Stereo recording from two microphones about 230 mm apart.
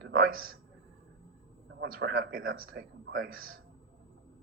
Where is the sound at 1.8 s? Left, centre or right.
Right.